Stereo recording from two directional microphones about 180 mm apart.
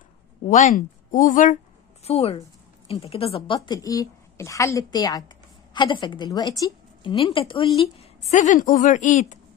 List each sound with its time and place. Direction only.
0.5 s speech: 45° left (ahead or behind)
2.0 s a woman's voice: 35° left (ahead or behind)